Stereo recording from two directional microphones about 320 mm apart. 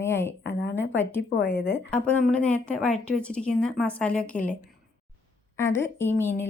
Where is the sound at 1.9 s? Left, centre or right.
Centre.